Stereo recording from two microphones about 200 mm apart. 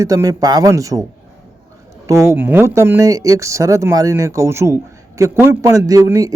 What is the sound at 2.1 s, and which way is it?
A man's voice, 15° right (ahead or behind).